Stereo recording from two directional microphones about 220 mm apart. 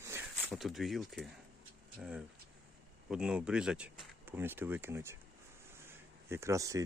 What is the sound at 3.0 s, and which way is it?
Speech, 5° right (ahead or behind).